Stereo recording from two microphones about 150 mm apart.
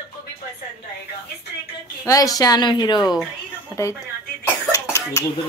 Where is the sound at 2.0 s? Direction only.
25° left (ahead or behind).